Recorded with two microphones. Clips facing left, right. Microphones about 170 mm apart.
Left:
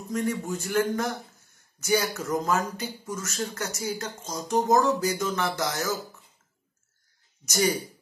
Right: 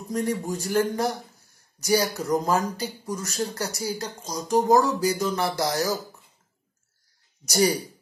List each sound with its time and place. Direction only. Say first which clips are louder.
0.1 s speech: right 2 dB; 35° right (ahead or behind)
7.4 s speech: right 3 dB; 35° right (ahead or behind)